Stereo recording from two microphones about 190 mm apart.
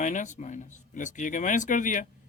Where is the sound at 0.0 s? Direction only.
40° left (ahead or behind).